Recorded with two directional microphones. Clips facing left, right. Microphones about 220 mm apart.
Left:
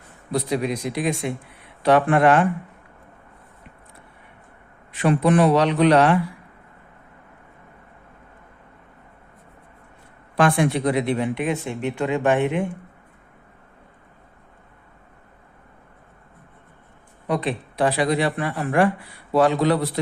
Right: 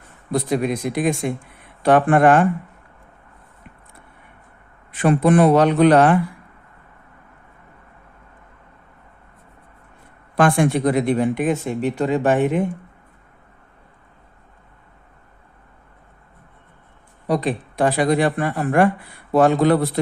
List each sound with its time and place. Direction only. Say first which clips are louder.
0.3 s speech: right 3 dB; 50° right (ahead or behind)
4.9 s speech: right 3 dB; 50° right (ahead or behind)
10.3 s speech: right 2 dB; 50° right (ahead or behind)
17.2 s speech: right 3 dB; 40° right (ahead or behind)